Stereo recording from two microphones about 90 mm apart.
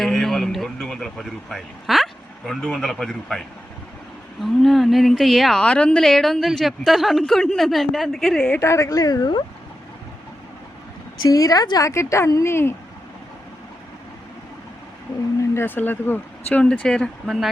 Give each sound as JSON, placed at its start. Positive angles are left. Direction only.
{"t": 0.0, "sound": "a man's voice", "side_deg": 0}
{"t": 4.4, "sound": "a man's voice", "side_deg": 0}
{"t": 8.4, "sound": "a woman's voice", "side_deg": 15}
{"t": 8.6, "sound": "speech", "side_deg": 35}
{"t": 11.3, "sound": "speech", "side_deg": 40}
{"t": 11.9, "sound": "speech", "side_deg": 35}
{"t": 15.5, "sound": "speech", "side_deg": 20}